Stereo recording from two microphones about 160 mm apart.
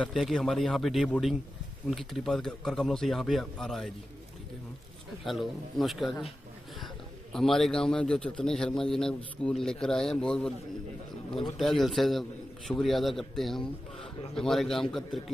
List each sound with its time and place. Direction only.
0.0 s a man's voice: centre (ahead or behind)
5.2 s a man's voice: centre (ahead or behind)
7.3 s a man's voice: centre (ahead or behind)